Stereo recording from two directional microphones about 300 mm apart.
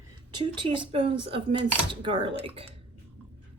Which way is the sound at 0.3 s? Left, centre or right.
Centre.